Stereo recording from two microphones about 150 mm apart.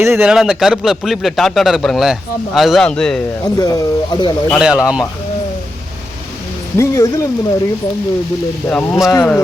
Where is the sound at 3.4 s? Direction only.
25° left (ahead or behind).